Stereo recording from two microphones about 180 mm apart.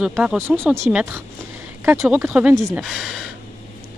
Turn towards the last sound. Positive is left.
turn(degrees=0)  # may be behind; listen again after turning